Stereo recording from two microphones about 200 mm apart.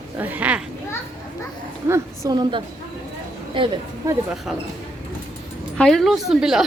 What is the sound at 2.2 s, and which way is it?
A woman's voice, 20° right (ahead or behind).